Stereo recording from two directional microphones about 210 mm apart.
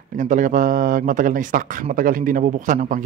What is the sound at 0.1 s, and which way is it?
Speech, 40° right (ahead or behind).